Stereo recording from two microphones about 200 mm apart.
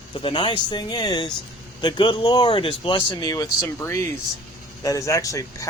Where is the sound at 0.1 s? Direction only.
25° left (ahead or behind).